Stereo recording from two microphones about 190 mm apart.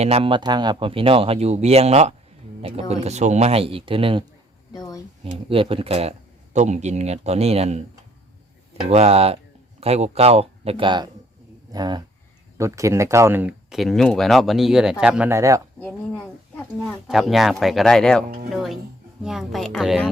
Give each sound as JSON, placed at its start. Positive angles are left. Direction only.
{"t": 0.0, "sound": "speech", "side_deg": -30}
{"t": 4.7, "sound": "a sound", "side_deg": 20}
{"t": 5.5, "sound": "speech", "side_deg": -30}
{"t": 8.9, "sound": "speech", "side_deg": -30}
{"t": 15.8, "sound": "speech", "side_deg": 5}